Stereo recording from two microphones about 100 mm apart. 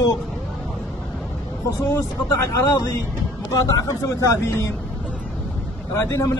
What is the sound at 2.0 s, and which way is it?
Speech, 30° left (ahead or behind).